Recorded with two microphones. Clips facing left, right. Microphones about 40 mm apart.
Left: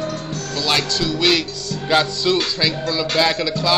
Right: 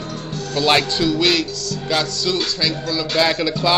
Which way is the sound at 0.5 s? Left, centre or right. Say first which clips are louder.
Right 4 dB; right.